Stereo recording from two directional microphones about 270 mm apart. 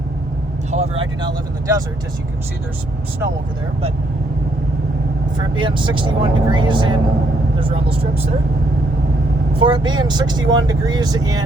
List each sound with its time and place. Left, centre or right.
0.7 s speech: right
5.4 s speech: centre
9.6 s speech: centre